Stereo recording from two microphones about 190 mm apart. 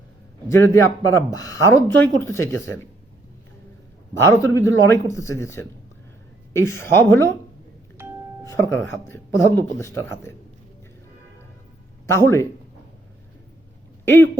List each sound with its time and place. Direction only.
0.4 s speech: 15° left (ahead or behind)
4.2 s speech: 15° left (ahead or behind)
8.4 s speech: 15° left (ahead or behind)
12.0 s speech: 15° left (ahead or behind)
14.0 s speech: 10° left (ahead or behind)